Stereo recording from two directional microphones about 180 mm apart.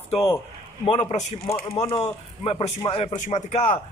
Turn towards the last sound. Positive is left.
turn(degrees=40)  # may be behind; listen again after turning